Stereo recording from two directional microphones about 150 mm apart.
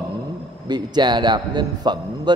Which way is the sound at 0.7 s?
30° right (ahead or behind).